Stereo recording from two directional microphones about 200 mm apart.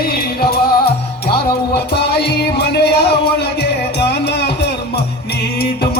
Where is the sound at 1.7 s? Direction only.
55° left (ahead or behind).